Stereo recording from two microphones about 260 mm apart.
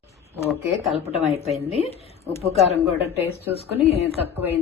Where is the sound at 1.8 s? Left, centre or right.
Left.